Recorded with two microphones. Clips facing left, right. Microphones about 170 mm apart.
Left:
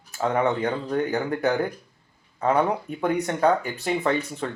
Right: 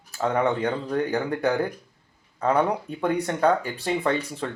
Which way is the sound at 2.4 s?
25° left (ahead or behind).